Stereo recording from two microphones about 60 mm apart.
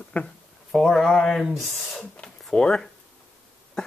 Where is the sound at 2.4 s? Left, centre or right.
Centre.